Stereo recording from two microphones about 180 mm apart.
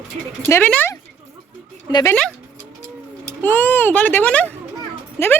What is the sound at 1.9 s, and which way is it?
Speech, 25° left (ahead or behind).